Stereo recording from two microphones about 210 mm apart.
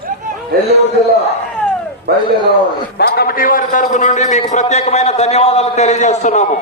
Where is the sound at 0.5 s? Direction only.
45° right (ahead or behind).